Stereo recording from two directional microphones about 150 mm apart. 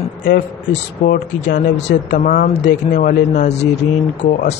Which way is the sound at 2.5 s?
55° left (ahead or behind).